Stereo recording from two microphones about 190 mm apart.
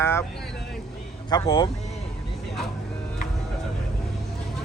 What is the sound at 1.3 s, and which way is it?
Speech, 25° left (ahead or behind).